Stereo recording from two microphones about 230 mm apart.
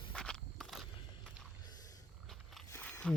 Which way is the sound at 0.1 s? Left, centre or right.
Centre.